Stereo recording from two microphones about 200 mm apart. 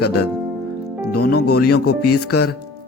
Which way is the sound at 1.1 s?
50° left (ahead or behind).